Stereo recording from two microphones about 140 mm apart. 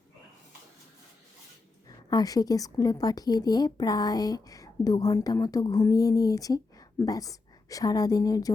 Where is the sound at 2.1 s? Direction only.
25° left (ahead or behind).